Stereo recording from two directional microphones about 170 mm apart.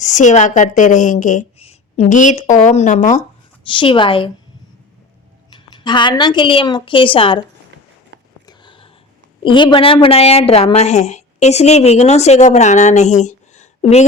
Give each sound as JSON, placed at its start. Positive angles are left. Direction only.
{"t": 0.0, "sound": "a woman's voice", "side_deg": 45}
{"t": 3.7, "sound": "a woman's voice", "side_deg": 30}
{"t": 5.5, "sound": "a woman's voice", "side_deg": 25}
{"t": 8.4, "sound": "a sound", "side_deg": 30}
{"t": 9.4, "sound": "a woman's voice", "side_deg": 30}